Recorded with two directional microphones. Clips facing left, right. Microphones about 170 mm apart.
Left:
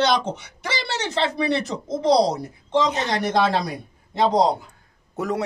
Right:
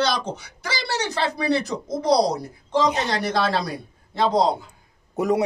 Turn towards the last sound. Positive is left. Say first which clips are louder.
# right 4 dB
turn(degrees=-15)  # may be behind; listen again after turning